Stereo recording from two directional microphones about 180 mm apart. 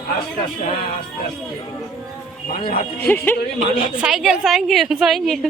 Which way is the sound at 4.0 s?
Centre (ahead or behind).